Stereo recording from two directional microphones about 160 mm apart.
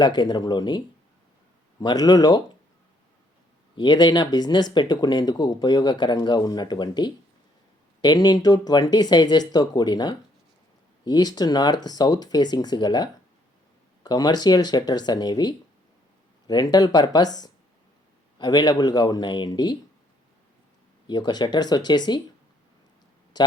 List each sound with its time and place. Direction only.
0.0 s speech: 25° left (ahead or behind)
1.8 s speech: 25° left (ahead or behind)
3.8 s speech: 25° left (ahead or behind)
18.3 s speech: 25° left (ahead or behind)
21.1 s speech: 25° left (ahead or behind)
23.3 s speech: 25° left (ahead or behind)